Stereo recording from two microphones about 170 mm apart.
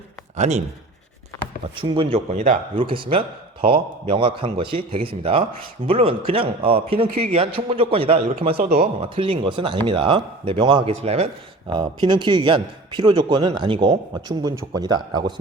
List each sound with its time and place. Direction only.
0.3 s speech: 40° right (ahead or behind)
1.7 s speech: 30° right (ahead or behind)
11.7 s a man's voice: 25° right (ahead or behind)
14.1 s a man's voice: 20° right (ahead or behind)